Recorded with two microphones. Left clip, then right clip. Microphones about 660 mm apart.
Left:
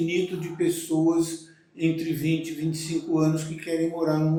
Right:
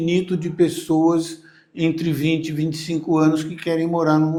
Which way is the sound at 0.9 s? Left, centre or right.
Right.